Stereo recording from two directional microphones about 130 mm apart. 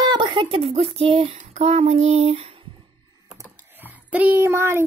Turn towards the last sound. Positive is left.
turn(degrees=-20)  # may be behind; listen again after turning